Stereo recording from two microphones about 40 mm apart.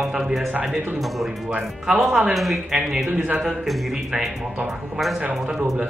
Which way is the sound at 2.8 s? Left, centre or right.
Centre.